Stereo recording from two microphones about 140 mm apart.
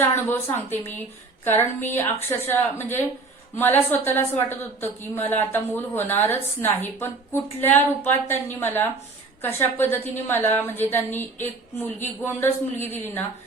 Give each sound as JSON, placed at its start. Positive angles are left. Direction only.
{"t": 0.0, "sound": "a woman's voice", "side_deg": 15}
{"t": 8.3, "sound": "a woman's voice", "side_deg": 15}